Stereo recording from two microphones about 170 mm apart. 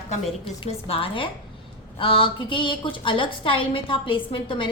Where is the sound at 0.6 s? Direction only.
35° left (ahead or behind).